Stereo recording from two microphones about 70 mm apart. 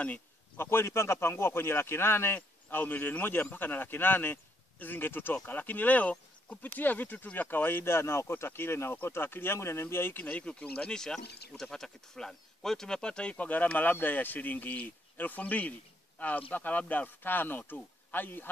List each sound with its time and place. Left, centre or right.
0.6 s a man's voice: left